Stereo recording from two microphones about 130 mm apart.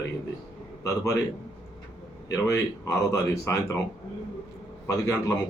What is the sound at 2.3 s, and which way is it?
Speech, 25° left (ahead or behind).